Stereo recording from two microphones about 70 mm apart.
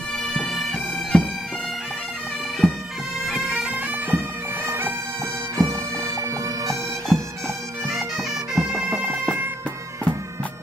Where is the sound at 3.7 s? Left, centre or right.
Right.